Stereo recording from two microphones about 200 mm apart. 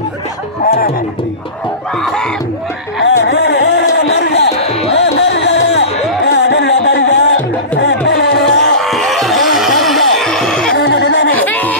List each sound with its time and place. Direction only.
3.0 s a sound: 60° left (ahead or behind)
7.8 s music: 60° left (ahead or behind)
8.8 s music: centre (ahead or behind)
10.8 s music: 60° left (ahead or behind)
11.3 s music: 10° left (ahead or behind)